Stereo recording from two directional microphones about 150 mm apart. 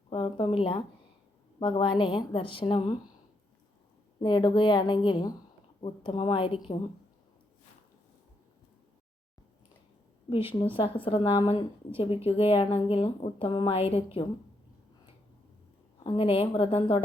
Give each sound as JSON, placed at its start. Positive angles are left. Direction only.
{"t": 0.1, "sound": "a sound", "side_deg": 35}
{"t": 1.5, "sound": "a woman's voice", "side_deg": 35}
{"t": 4.2, "sound": "a woman's voice", "side_deg": 30}
{"t": 10.8, "sound": "a woman's voice", "side_deg": 35}
{"t": 16.0, "sound": "a woman's voice", "side_deg": 35}